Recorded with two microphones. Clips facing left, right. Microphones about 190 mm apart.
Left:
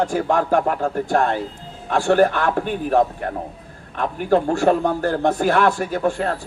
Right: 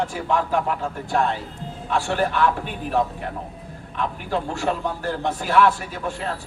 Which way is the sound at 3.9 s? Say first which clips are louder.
Left 7 dB; 50° left (ahead or behind).